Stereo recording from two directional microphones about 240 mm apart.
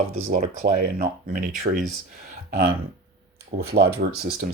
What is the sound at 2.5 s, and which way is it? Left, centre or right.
Speech, right.